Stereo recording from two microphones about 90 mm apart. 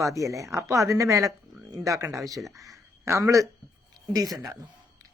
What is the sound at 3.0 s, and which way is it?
Speech, 35° right (ahead or behind).